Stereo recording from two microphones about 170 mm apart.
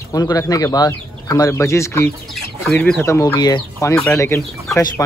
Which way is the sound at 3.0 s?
15° left (ahead or behind).